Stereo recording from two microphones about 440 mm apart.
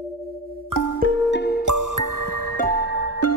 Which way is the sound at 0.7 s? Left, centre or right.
Right.